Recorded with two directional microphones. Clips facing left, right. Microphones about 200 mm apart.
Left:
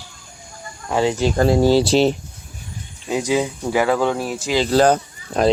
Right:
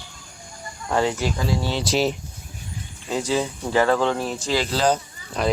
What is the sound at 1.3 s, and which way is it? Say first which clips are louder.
Speech: left 10 dB; 55° left (ahead or behind).